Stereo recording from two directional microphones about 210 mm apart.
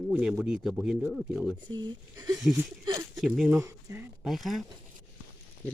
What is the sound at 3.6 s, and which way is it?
Speech, 15° right (ahead or behind).